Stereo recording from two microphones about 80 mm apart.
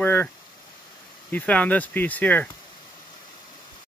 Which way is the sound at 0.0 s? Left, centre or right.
Left.